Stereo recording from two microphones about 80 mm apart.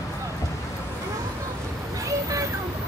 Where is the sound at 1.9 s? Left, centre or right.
Right.